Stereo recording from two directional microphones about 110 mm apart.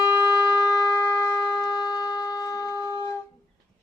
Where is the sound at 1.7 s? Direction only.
35° left (ahead or behind).